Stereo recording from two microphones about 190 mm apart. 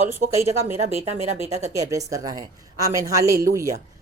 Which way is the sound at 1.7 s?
15° right (ahead or behind).